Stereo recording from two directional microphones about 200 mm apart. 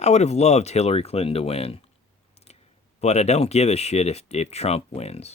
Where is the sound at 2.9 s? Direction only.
35° left (ahead or behind).